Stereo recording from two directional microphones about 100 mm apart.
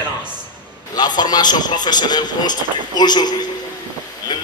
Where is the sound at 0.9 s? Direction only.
45° left (ahead or behind).